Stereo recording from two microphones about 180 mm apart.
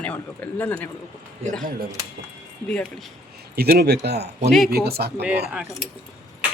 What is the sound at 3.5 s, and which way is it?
Speech, 60° right (ahead or behind).